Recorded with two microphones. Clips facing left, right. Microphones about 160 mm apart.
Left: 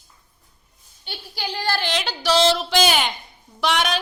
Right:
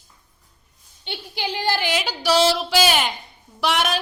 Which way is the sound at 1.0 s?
20° right (ahead or behind).